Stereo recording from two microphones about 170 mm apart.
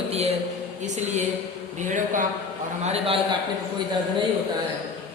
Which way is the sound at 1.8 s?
50° right (ahead or behind).